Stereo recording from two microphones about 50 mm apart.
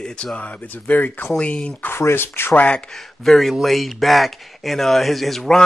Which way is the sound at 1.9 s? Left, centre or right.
Left.